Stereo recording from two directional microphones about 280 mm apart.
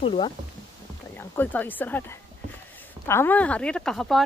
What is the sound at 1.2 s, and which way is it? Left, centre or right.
Speech, centre.